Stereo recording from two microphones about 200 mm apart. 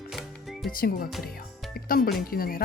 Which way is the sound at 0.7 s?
45° left (ahead or behind).